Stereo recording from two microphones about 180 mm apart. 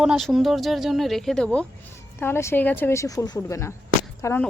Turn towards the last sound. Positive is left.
turn(degrees=15)  # may be behind; listen again after turning